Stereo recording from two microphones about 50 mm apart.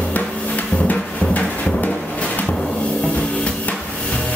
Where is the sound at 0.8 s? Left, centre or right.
Left.